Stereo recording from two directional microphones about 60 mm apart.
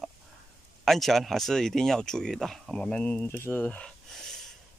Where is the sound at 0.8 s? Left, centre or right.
Centre; by 3.3 s left.